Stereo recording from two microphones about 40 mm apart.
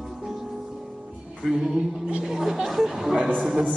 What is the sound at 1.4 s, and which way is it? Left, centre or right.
Music, centre.